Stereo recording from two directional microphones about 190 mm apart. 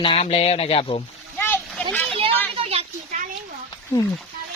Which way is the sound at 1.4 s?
10° left (ahead or behind).